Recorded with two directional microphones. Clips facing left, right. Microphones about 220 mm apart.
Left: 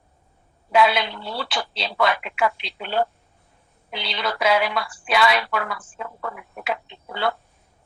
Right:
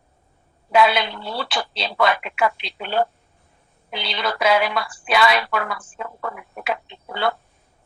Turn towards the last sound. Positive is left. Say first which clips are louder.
# right 2 dB
turn(degrees=-55)  # may be behind; listen again after turning